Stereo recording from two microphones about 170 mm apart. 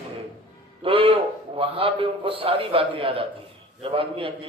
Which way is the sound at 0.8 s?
35° right (ahead or behind).